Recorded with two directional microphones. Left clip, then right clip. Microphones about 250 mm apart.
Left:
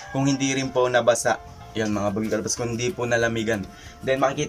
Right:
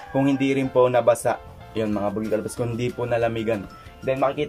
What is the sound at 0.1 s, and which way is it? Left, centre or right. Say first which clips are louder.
Speech: right 3 dB; centre.